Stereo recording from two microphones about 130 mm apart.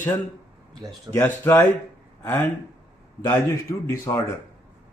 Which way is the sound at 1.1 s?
20° left (ahead or behind).